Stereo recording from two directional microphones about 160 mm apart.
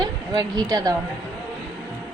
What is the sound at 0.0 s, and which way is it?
Speech, 25° right (ahead or behind).